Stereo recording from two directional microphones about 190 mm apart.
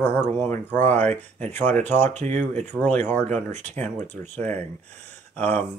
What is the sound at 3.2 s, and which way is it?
Speech, 35° right (ahead or behind).